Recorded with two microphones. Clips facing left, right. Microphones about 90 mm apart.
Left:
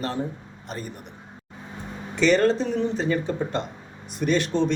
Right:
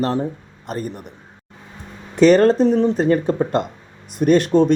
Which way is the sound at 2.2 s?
50° right (ahead or behind).